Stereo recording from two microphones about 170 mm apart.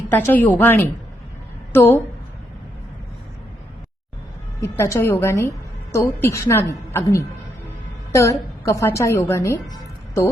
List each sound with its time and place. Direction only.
0.1 s a woman's voice: 10° left (ahead or behind)
4.6 s a woman's voice: 15° left (ahead or behind)